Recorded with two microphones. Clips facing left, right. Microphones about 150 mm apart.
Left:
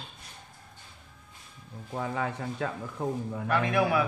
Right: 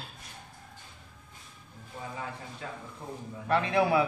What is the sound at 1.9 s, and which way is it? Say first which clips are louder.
Speech: left 8 dB; 80° left.